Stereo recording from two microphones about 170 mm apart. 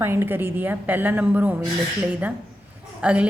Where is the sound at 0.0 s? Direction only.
15° right (ahead or behind).